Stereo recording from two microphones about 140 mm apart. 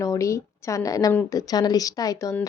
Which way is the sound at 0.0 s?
25° left (ahead or behind).